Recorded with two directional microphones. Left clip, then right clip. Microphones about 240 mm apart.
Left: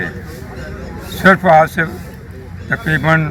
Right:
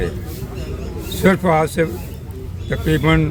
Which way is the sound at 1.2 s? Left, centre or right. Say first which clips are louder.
Left 7 dB; centre.